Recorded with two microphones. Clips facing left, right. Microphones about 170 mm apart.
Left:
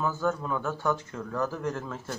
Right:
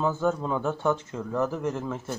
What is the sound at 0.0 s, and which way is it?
Speech, 20° right (ahead or behind).